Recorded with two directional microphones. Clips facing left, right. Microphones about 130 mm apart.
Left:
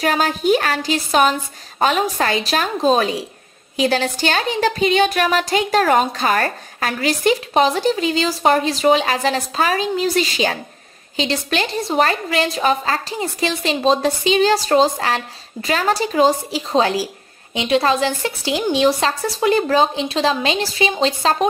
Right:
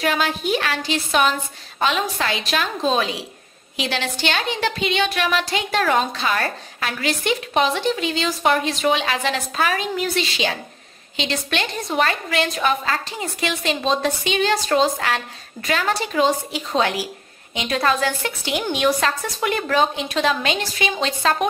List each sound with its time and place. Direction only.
0.0 s a woman's voice: 40° left (ahead or behind)